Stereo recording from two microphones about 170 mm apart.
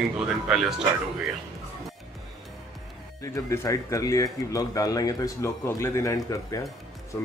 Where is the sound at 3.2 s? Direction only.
20° left (ahead or behind).